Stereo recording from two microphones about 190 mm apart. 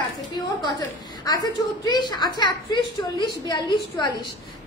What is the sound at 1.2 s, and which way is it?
A woman's voice, 20° left (ahead or behind).